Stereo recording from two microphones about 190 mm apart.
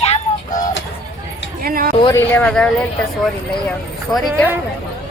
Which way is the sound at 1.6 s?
50° right (ahead or behind).